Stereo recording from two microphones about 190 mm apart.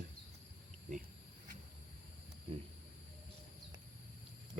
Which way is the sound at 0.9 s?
40° right (ahead or behind).